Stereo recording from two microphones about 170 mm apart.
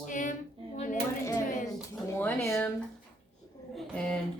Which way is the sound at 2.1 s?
10° left (ahead or behind).